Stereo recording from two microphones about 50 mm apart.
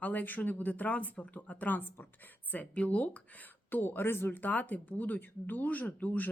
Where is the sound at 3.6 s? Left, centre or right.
Left.